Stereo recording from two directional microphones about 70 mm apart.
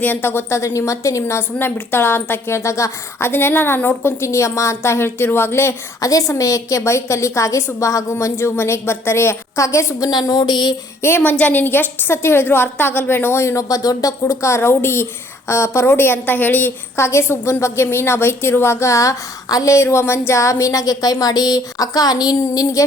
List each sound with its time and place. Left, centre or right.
0.0 s a woman's voice: left
6.0 s a woman's voice: left
8.1 s a woman's voice: left
10.1 s a sound: left
11.2 s a woman's voice: left
13.7 s a woman's voice: left
17.0 s a woman's voice: left
22.4 s a woman's voice: left